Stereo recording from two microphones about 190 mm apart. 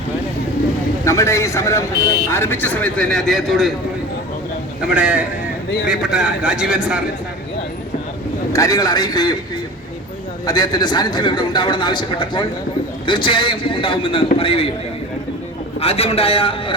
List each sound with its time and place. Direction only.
1.0 s speech: 15° left (ahead or behind)
4.9 s a man's voice: 5° right (ahead or behind)
8.5 s a man's voice: 20° left (ahead or behind)
10.4 s a man's voice: 20° left (ahead or behind)
15.8 s a man's voice: 30° left (ahead or behind)